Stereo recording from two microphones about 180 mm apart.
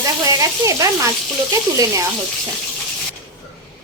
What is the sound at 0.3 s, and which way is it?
Speech, 20° right (ahead or behind).